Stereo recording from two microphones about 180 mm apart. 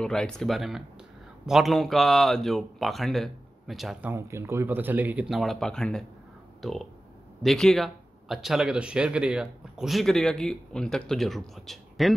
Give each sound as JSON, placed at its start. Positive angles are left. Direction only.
{"t": 0.0, "sound": "speech", "side_deg": 5}
{"t": 4.1, "sound": "speech", "side_deg": -15}